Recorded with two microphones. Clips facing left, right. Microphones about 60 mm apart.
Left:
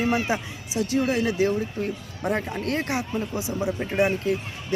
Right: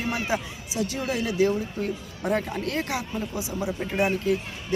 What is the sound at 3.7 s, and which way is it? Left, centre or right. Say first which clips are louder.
Speech: left 2 dB; centre.